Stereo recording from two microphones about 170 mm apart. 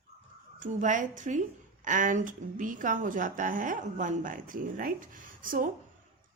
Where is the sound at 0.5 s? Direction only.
50° right (ahead or behind).